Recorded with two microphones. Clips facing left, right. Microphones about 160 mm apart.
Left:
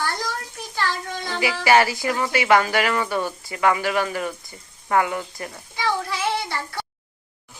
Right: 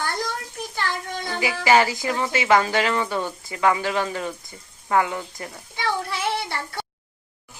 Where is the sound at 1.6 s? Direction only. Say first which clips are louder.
Left 1 dB; 15° right (ahead or behind).